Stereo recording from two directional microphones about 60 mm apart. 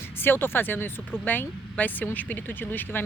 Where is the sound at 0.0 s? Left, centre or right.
Left.